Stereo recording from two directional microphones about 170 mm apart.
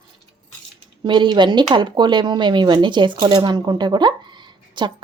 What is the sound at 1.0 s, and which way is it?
Speech, 25° right (ahead or behind).